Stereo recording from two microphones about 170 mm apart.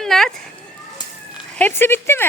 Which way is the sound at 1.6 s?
10° left (ahead or behind).